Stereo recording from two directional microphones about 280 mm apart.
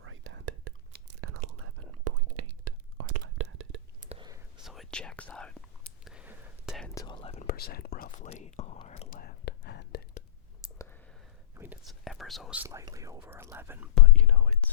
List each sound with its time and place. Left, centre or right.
0.0 s whispering: right
1.2 s whispering: right
3.4 s whispering: right
4.1 s whispering: centre
4.6 s whispering: centre
6.9 s whispering: centre; by 10.0 s left
11.5 s speech: centre